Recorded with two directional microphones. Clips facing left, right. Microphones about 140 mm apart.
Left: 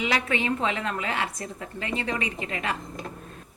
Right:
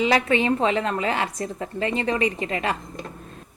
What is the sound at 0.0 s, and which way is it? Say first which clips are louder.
A woman's voice: right 6 dB; 35° right (ahead or behind).